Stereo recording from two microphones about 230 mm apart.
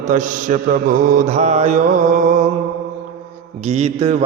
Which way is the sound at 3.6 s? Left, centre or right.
Right.